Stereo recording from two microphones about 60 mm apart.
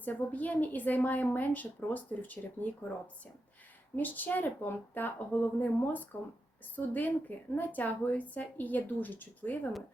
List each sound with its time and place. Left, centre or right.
0.0 s a woman's voice: left
3.9 s a woman's voice: left